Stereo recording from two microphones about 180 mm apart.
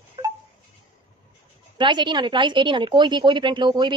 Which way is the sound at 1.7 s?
25° right (ahead or behind).